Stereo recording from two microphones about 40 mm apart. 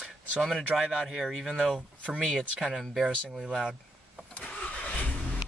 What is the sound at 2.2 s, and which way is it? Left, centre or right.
Speech, centre.